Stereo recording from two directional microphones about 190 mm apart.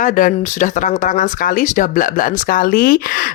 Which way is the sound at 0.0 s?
45° left (ahead or behind).